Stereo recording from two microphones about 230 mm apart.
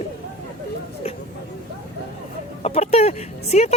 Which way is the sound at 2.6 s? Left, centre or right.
Left.